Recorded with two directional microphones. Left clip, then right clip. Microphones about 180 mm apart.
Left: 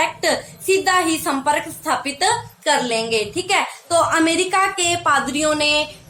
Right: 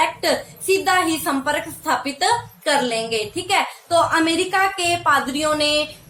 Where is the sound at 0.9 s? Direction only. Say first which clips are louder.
Left 1 dB; 20° left (ahead or behind).